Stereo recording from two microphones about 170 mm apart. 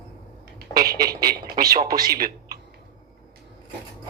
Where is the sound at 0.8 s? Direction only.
60° right (ahead or behind).